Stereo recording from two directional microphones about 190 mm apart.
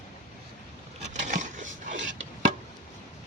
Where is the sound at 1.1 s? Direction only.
40° right (ahead or behind).